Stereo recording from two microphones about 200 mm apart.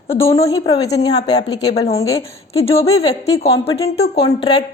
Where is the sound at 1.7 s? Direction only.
30° left (ahead or behind).